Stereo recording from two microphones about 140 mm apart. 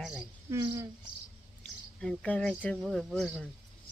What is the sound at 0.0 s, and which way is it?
Cricket, centre (ahead or behind).